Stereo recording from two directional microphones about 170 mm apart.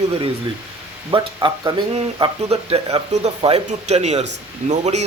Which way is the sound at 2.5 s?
35° right (ahead or behind).